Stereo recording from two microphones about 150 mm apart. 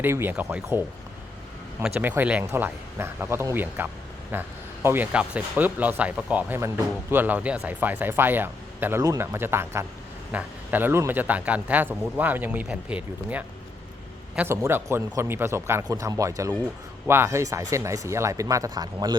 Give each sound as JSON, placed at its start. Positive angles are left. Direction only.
{"t": 0.0, "sound": "speech", "side_deg": -15}